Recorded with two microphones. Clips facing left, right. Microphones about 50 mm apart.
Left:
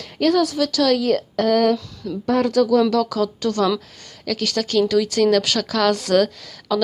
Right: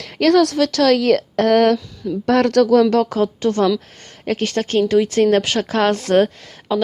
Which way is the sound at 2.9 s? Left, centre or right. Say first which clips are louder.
Right 3 dB; right.